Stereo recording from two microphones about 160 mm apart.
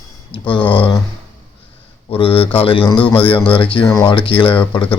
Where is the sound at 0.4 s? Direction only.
30° left (ahead or behind).